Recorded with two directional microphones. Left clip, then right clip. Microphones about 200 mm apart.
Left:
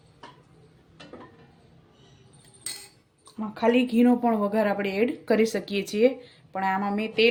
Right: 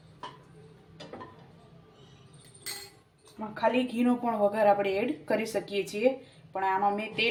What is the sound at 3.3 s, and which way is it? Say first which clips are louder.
Speech: left 4 dB; 55° left (ahead or behind).